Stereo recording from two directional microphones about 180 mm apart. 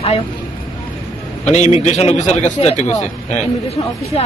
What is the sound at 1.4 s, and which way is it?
Speech, 40° left (ahead or behind).